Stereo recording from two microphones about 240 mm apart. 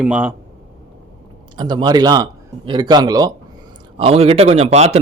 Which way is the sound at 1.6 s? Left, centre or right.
Centre.